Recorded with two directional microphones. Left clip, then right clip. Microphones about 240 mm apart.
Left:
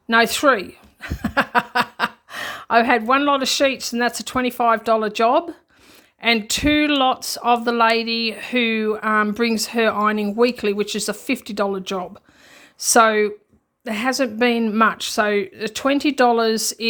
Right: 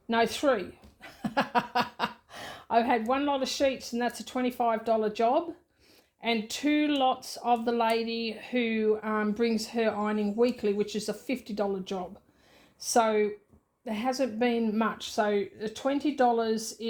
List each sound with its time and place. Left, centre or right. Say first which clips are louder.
0.1 s a woman's voice: left 10 dB; left